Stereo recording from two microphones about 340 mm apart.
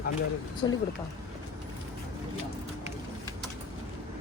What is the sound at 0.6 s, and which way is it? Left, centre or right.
Speech, centre.